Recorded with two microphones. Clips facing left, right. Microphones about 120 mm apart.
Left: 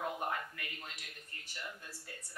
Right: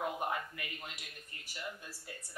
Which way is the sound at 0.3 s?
15° right (ahead or behind).